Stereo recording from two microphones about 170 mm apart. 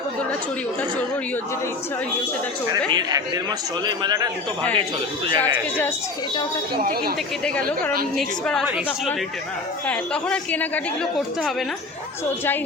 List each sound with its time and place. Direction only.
2.7 s speech: 25° right (ahead or behind)
7.4 s a woman's voice: 5° left (ahead or behind)
9.8 s a woman's voice: 5° left (ahead or behind)